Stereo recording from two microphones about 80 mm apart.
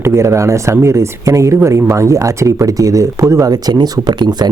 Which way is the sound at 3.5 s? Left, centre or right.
Right.